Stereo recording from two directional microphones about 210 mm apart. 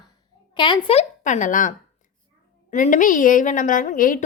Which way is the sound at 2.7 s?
40° left (ahead or behind).